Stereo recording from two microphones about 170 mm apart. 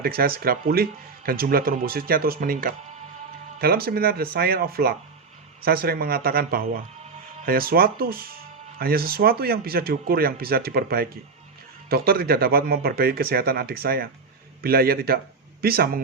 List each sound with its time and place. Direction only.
0.0 s speech: 60° right (ahead or behind)